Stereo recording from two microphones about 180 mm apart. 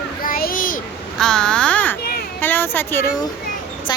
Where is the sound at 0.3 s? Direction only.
55° left (ahead or behind).